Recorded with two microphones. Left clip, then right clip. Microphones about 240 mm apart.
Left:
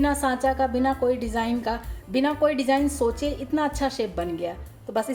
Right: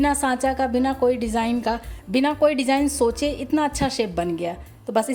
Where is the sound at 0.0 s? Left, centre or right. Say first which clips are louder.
Right 2 dB; right.